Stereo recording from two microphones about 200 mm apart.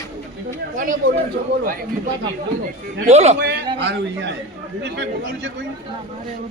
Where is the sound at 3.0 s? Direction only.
35° right (ahead or behind).